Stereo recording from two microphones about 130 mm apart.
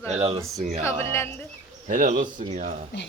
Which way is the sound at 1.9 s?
85° right.